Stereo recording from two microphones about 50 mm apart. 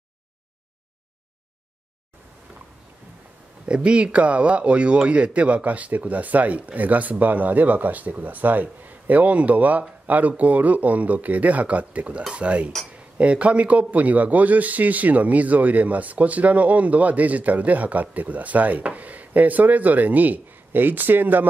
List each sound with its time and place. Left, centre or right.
3.6 s speech: right
12.2 s speech: centre
12.4 s speech: right